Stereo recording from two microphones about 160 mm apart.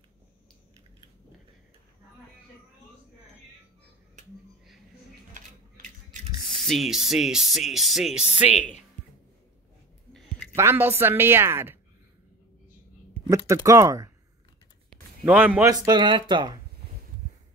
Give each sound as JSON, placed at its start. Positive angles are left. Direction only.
{"t": 6.5, "sound": "speech", "side_deg": 0}
{"t": 10.5, "sound": "a woman's voice", "side_deg": -15}
{"t": 13.5, "sound": "speech", "side_deg": -20}
{"t": 15.2, "sound": "a woman's voice", "side_deg": -10}
{"t": 15.7, "sound": "speech", "side_deg": -25}